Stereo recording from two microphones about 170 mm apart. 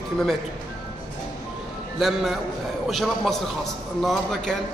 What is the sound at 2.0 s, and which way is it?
A man's voice, centre (ahead or behind).